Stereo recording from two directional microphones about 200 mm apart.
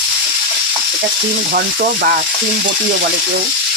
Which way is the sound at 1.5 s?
45° right (ahead or behind).